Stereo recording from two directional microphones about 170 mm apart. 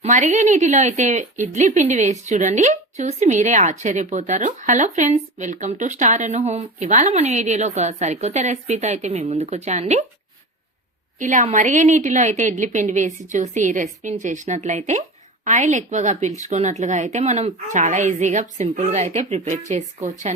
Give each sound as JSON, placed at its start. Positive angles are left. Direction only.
{"t": 0.0, "sound": "speech", "side_deg": -45}
{"t": 11.2, "sound": "speech", "side_deg": -50}